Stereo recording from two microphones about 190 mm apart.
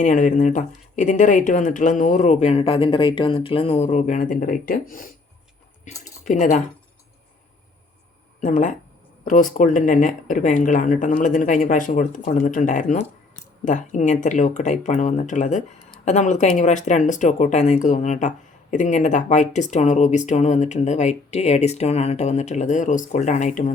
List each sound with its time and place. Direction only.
0.0 s speech: 40° left (ahead or behind)
6.2 s speech: 40° left (ahead or behind)
8.4 s speech: 40° left (ahead or behind)